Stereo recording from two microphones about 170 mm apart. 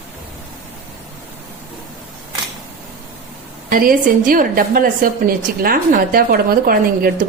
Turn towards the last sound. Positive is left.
turn(degrees=-60)  # may be behind; listen again after turning